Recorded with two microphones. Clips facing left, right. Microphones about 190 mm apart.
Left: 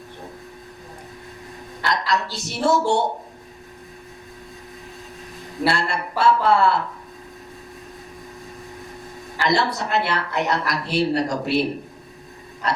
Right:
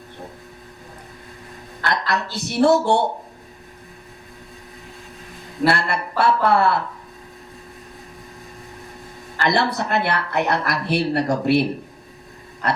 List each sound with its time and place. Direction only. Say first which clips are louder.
1.8 s speech: even; 55° right (ahead or behind)
5.6 s speech: right 3 dB; 55° right (ahead or behind)
9.4 s speech: right 1 dB; 55° right (ahead or behind)